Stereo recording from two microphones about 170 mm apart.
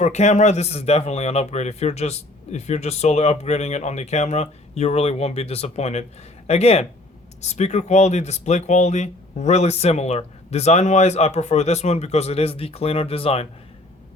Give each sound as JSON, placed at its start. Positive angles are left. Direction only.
{"t": 0.0, "sound": "speech", "side_deg": 45}